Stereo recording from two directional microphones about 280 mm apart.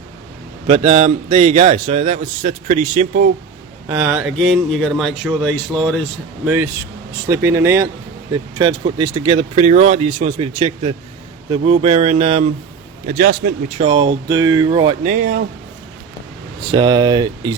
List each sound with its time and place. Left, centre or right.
0.7 s a man's voice: right
3.8 s a man's voice: centre; by 13.5 s right
13.7 s speech: centre
16.7 s speech: centre